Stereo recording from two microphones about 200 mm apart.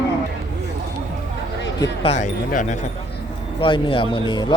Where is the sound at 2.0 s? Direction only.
35° left (ahead or behind).